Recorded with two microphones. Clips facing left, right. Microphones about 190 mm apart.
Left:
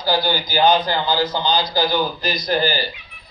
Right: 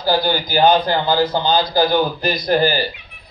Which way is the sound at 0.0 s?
50° right (ahead or behind).